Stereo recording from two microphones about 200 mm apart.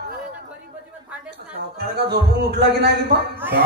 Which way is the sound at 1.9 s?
55° right (ahead or behind).